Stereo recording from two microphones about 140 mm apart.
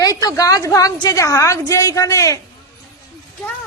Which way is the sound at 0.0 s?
25° left (ahead or behind).